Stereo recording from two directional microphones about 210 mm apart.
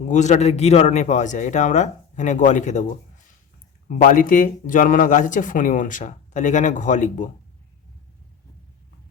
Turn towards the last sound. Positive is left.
turn(degrees=35)  # may be behind; listen again after turning